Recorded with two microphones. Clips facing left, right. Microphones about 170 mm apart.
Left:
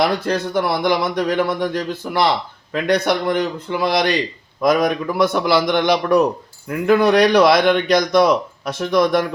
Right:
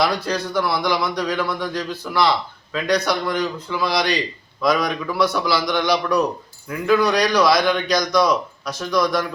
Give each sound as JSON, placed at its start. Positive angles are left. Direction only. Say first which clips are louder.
{"t": 0.0, "sound": "speech", "louder": "left 3 dB", "side_deg": 50}